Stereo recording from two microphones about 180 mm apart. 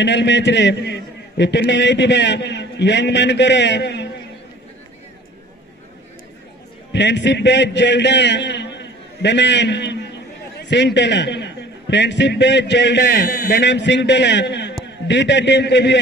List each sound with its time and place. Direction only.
0.0 s a man's voice: 75° left (ahead or behind)
6.9 s a man's voice: 70° left (ahead or behind)